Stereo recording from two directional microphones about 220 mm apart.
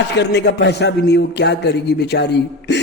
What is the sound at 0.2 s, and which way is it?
Speech, 50° left (ahead or behind).